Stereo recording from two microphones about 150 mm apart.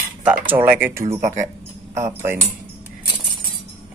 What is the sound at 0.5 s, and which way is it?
Speech, 10° right (ahead or behind).